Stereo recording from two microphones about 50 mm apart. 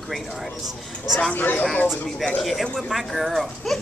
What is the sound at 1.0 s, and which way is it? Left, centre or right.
Speech, centre.